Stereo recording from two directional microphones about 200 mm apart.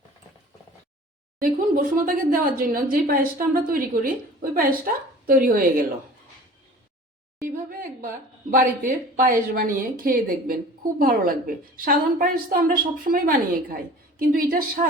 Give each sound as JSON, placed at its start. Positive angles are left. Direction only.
{"t": 1.4, "sound": "speech", "side_deg": -45}
{"t": 7.7, "sound": "speech", "side_deg": -45}